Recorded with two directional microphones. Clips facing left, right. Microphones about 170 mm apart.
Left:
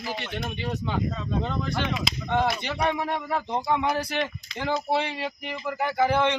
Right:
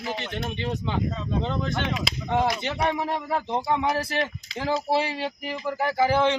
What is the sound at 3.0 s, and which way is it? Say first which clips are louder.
Speech: right 1 dB; centre (ahead or behind).